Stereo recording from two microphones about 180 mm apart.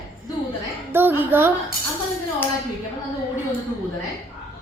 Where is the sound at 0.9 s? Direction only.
10° right (ahead or behind).